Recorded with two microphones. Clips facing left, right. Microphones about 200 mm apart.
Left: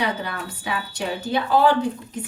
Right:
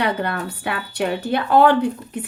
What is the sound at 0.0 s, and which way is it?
A woman's voice, 60° right (ahead or behind).